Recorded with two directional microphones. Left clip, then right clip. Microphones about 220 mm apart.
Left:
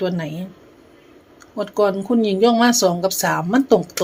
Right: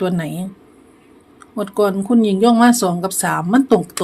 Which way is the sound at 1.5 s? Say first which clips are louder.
Right 1 dB; 10° right (ahead or behind).